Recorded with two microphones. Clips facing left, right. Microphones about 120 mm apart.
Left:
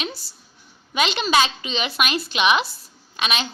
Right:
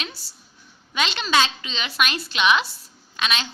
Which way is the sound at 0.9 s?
10° left (ahead or behind).